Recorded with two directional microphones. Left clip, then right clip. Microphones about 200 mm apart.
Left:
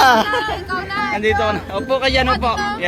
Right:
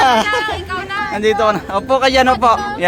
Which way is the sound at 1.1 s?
20° right (ahead or behind).